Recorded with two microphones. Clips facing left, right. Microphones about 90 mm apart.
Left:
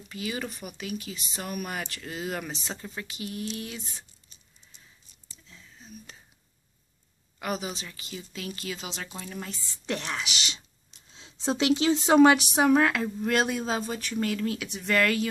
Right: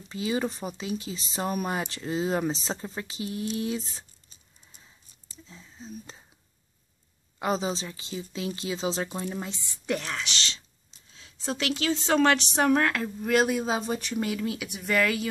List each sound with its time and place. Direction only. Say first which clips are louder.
0.1 s speech: right 5 dB; 30° right (ahead or behind)
5.5 s whispering: right 6 dB; 30° right (ahead or behind)
7.3 s speech: right 5 dB; 25° right (ahead or behind)
9.8 s speech: right 1 dB; centre (ahead or behind)
11.1 s speech: left 4 dB; 20° left (ahead or behind); by 13.7 s 5° right (ahead or behind)
13.7 s speech: right 1 dB; 20° right (ahead or behind)
14.3 s speech: left 1 dB; 5° right (ahead or behind)